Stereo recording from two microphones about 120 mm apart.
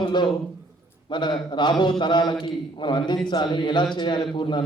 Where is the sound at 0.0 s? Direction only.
40° left (ahead or behind).